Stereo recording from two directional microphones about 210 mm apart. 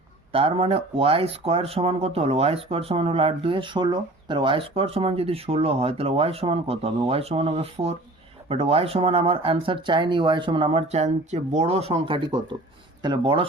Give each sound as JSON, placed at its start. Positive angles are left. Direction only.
{"t": 0.3, "sound": "speech", "side_deg": -25}